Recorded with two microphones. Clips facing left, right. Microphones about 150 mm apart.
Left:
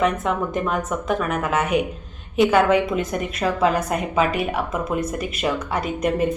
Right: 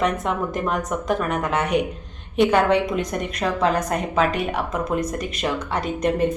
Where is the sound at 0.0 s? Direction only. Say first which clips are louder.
Left 1 dB; centre (ahead or behind).